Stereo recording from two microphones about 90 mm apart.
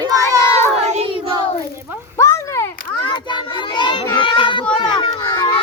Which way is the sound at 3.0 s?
65° left (ahead or behind).